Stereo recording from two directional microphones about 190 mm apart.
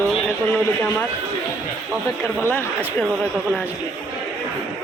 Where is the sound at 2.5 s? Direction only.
10° left (ahead or behind).